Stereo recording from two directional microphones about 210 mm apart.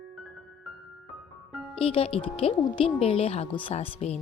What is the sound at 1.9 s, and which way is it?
Speech, 25° left (ahead or behind).